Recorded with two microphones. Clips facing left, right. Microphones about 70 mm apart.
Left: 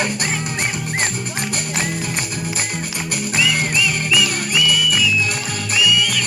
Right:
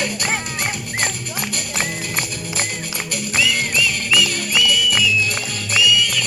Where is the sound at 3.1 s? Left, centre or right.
Left.